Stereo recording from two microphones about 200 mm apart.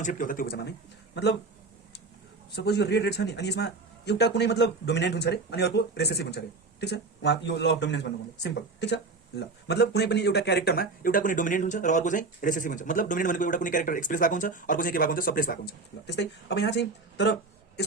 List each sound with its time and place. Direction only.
0.0 s speech: 40° left (ahead or behind); by 1.4 s 60° left (ahead or behind)
2.6 s a man's voice: 55° left (ahead or behind)